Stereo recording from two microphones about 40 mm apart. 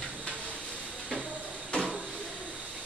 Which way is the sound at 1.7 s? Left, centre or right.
Left.